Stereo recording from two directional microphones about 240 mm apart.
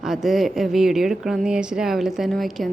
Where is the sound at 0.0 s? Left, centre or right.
Centre.